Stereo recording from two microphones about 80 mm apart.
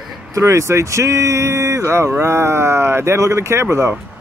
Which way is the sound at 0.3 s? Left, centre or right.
Right.